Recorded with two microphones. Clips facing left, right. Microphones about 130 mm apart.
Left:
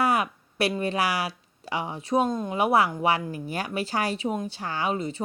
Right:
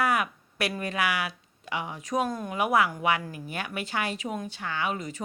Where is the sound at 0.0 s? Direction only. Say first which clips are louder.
Left 2 dB; 30° left (ahead or behind).